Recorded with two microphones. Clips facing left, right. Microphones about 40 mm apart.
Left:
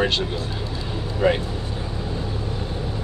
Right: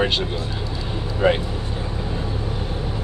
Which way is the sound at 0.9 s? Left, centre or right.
Centre.